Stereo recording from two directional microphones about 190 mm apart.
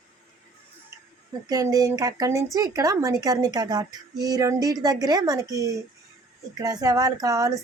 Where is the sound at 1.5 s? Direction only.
20° right (ahead or behind).